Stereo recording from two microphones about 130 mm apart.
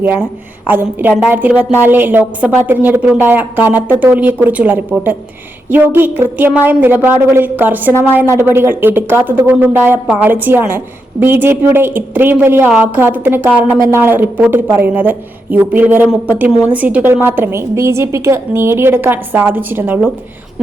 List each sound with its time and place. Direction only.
0.0 s a woman's voice: 15° right (ahead or behind)